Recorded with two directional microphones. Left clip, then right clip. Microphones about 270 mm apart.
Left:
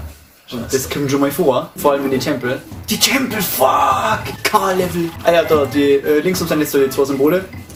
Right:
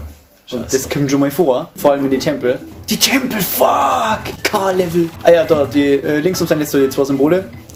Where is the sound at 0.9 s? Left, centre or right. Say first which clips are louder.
Even; right.